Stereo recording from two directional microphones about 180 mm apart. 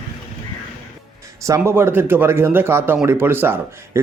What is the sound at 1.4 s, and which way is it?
Speech, 15° right (ahead or behind).